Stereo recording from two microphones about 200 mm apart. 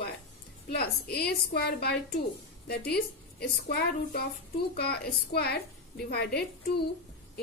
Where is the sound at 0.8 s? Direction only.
55° left (ahead or behind).